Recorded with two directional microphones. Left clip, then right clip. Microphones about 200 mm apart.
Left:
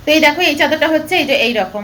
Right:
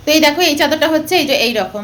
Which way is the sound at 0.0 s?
30° right (ahead or behind).